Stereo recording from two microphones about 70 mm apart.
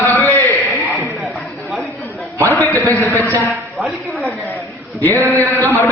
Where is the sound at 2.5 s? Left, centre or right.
Left.